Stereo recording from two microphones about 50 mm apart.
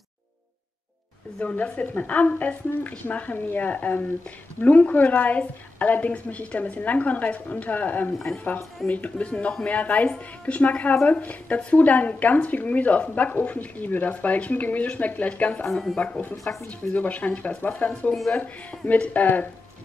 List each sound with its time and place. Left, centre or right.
1.4 s a woman's voice: left
8.1 s speech: centre
8.8 s a woman's voice: left
9.3 s speech: centre
9.7 s a woman's voice: left
15.6 s speech: centre
16.5 s a woman's voice: left